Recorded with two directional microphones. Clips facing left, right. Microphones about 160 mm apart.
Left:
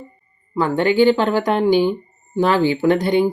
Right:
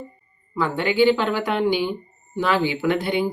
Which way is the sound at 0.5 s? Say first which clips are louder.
Left 5 dB; 45° left (ahead or behind).